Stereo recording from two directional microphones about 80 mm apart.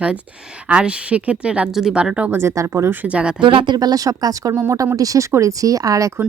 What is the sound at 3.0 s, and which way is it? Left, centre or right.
Speech, centre.